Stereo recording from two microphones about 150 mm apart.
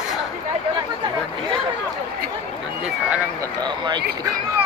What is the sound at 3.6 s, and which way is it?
Speech, 30° right (ahead or behind).